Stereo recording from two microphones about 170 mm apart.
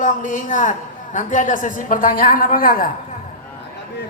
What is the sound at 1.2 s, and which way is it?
A woman's voice, 50° left (ahead or behind).